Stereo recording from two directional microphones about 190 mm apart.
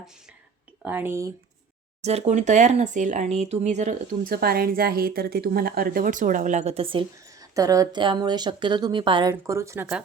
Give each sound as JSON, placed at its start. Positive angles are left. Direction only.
{"t": 0.8, "sound": "a woman's voice", "side_deg": -10}
{"t": 2.0, "sound": "speech", "side_deg": -35}
{"t": 7.3, "sound": "a woman's voice", "side_deg": -15}